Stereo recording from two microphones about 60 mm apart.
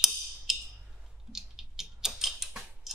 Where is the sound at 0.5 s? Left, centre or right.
Centre.